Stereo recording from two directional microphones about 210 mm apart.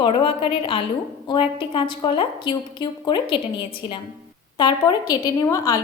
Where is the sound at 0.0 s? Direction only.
25° left (ahead or behind).